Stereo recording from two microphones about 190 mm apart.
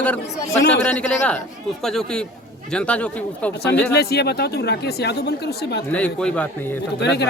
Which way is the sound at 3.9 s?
60° left (ahead or behind).